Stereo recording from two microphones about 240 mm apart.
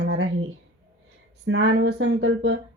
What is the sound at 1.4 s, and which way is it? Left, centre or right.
Speech, right.